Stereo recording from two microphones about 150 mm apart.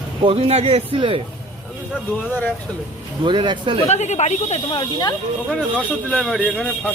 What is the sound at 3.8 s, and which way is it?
Speech, 50° left (ahead or behind).